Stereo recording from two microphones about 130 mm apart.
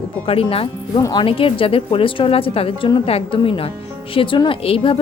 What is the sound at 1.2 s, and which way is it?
Speech, 45° left (ahead or behind).